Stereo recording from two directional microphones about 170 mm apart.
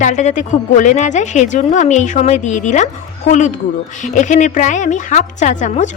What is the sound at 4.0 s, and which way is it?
A woman's voice, 45° left (ahead or behind).